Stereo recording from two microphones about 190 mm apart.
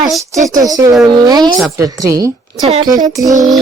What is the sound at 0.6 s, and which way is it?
Speech, 20° right (ahead or behind).